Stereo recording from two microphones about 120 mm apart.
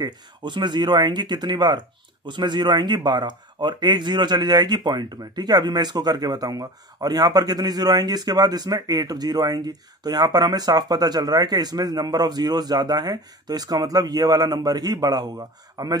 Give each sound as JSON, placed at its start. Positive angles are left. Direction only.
{"t": 0.0, "sound": "speech", "side_deg": -40}